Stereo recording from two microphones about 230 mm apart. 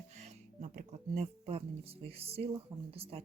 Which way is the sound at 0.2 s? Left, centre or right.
Right.